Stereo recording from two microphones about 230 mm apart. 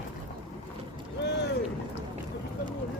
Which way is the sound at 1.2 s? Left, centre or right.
Left.